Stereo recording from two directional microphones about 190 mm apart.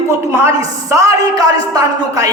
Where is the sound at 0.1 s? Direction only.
15° right (ahead or behind).